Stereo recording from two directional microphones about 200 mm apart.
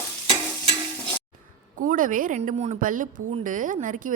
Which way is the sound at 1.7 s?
45° right (ahead or behind).